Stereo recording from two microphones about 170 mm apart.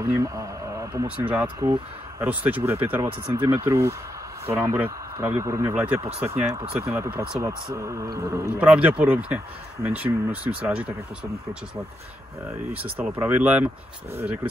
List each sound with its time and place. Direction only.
0.0 s speech: 20° right (ahead or behind)
1.6 s speech: 20° right (ahead or behind)
2.2 s speech: 10° right (ahead or behind)
8.5 s speech: 10° right (ahead or behind)
12.4 s speech: 10° right (ahead or behind)